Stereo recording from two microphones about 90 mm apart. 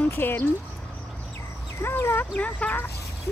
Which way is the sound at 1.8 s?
25° left (ahead or behind).